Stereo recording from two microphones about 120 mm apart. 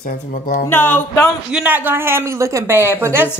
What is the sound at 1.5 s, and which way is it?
A woman's voice, 15° right (ahead or behind).